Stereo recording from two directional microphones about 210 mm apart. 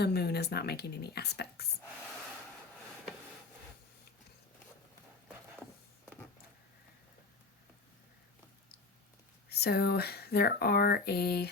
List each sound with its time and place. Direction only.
0.0 s speech: 50° left (ahead or behind)
9.5 s speech: 50° left (ahead or behind)